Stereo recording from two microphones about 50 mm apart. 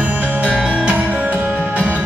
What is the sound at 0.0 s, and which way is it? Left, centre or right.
Music, right.